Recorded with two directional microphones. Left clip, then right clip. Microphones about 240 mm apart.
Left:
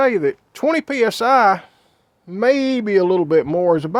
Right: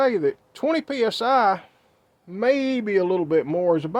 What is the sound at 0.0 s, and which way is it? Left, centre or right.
A man's voice, left.